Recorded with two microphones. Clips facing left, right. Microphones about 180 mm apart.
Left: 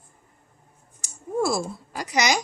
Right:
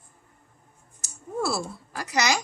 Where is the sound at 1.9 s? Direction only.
20° left (ahead or behind).